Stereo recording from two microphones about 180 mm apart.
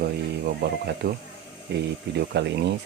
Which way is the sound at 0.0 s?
65° right (ahead or behind).